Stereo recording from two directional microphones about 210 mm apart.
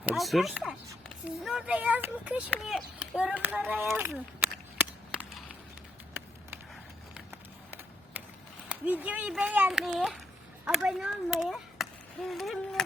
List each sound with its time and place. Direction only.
0.0 s speech: 5° right (ahead or behind)
8.7 s speech: 5° right (ahead or behind)